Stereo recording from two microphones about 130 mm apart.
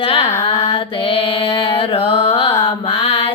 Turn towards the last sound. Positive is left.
turn(degrees=50)  # may be behind; listen again after turning